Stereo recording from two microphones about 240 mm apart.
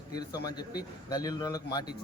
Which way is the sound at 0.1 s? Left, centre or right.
Centre.